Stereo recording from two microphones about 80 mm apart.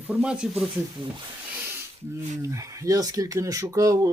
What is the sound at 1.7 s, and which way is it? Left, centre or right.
Speech, right.